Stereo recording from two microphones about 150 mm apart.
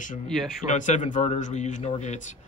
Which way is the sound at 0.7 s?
55° left (ahead or behind).